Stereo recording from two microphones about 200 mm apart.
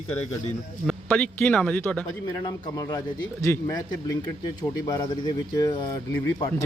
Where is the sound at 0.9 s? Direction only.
5° left (ahead or behind).